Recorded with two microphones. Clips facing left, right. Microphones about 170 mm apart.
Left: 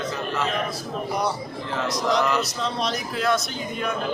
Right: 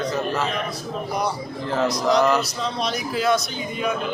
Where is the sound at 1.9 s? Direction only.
Centre (ahead or behind).